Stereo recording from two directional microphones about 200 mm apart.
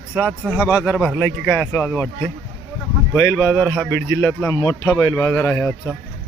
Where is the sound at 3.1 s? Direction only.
10° left (ahead or behind).